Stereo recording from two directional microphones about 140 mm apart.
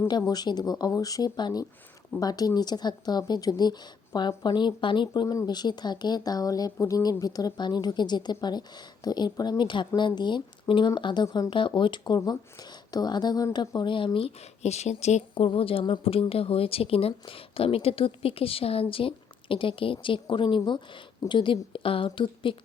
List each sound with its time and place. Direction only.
0.1 s a woman's voice: 30° left (ahead or behind)